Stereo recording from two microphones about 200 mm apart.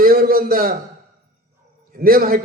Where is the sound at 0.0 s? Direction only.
50° right (ahead or behind).